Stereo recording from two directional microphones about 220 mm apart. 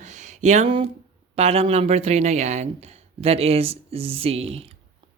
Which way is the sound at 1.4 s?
25° right (ahead or behind).